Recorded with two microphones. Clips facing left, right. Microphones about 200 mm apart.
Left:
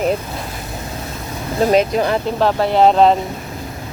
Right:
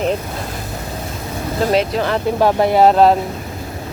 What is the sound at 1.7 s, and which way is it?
Speech, 15° left (ahead or behind).